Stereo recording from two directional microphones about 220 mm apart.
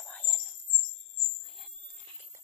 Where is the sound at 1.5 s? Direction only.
Centre (ahead or behind).